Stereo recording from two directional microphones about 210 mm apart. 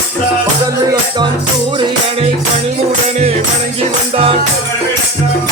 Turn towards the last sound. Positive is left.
turn(degrees=-25)  # may be behind; listen again after turning